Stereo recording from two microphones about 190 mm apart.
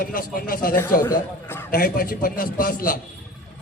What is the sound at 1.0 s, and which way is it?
Speech, 10° left (ahead or behind).